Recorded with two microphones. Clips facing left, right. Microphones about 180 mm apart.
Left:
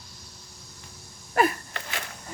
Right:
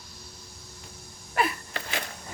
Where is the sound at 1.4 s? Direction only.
45° left (ahead or behind).